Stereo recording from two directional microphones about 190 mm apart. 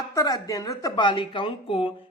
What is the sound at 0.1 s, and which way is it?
Speech, 20° left (ahead or behind).